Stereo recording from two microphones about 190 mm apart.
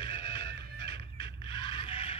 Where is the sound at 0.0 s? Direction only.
25° left (ahead or behind).